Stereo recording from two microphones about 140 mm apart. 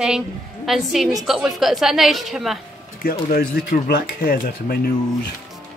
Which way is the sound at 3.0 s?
90° left.